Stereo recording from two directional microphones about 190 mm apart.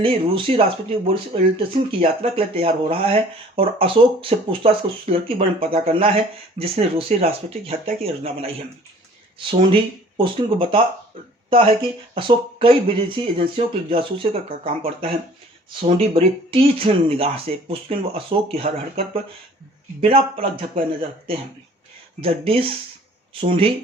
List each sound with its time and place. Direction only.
0.0 s speech: 30° right (ahead or behind)
22.2 s speech: 30° right (ahead or behind)